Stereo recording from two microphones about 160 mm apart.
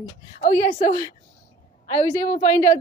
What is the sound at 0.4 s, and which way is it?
Speech, 45° left (ahead or behind).